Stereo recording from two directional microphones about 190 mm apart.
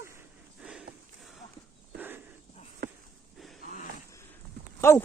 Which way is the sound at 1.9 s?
10° right (ahead or behind).